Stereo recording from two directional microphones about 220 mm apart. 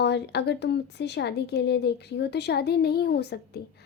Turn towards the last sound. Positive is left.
turn(degrees=50)  # may be behind; listen again after turning